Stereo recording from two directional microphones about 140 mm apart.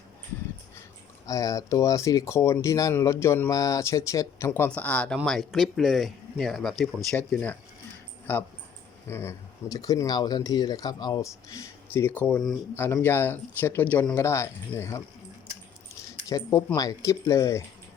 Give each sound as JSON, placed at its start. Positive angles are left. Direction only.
{"t": 1.3, "sound": "speech", "side_deg": 25}
{"t": 14.2, "sound": "speech", "side_deg": 20}
{"t": 16.3, "sound": "speech", "side_deg": 20}